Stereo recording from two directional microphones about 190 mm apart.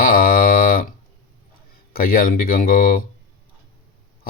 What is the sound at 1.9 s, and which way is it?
Speech, 50° left (ahead or behind).